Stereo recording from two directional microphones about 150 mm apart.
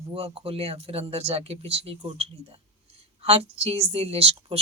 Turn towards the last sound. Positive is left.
turn(degrees=-40)  # may be behind; listen again after turning